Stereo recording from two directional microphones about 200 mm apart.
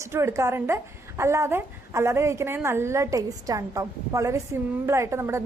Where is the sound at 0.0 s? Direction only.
15° right (ahead or behind).